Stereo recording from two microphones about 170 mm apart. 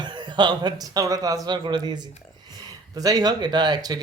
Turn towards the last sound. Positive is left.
turn(degrees=-25)  # may be behind; listen again after turning